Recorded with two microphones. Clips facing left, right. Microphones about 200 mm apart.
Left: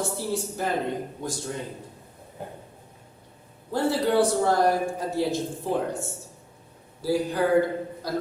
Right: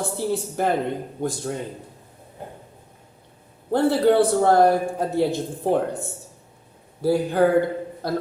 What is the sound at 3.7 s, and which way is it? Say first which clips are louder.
A man's voice: right 5 dB; 60° right (ahead or behind).